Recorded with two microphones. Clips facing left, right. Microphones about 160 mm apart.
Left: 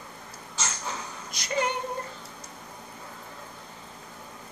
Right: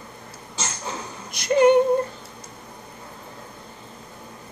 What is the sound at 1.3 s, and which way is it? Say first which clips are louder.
Female singing: right 13 dB; 60° right (ahead or behind).